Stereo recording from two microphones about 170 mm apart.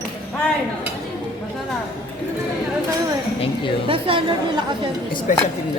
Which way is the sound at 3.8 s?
30° right (ahead or behind).